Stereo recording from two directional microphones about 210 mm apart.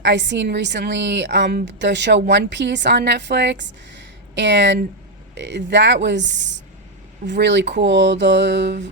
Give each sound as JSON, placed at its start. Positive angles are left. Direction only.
{"t": 0.0, "sound": "a woman's voice", "side_deg": -55}